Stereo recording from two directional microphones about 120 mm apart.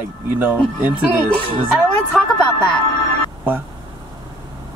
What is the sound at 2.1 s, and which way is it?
Speech, 5° left (ahead or behind).